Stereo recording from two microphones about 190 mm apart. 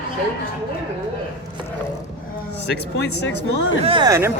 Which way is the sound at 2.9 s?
65° left (ahead or behind).